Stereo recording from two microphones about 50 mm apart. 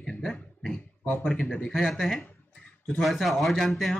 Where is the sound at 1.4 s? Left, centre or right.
Left.